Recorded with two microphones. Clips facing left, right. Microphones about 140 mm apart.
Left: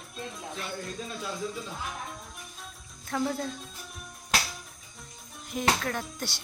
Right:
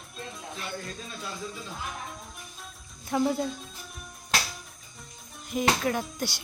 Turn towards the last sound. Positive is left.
turn(degrees=-5)  # may be behind; listen again after turning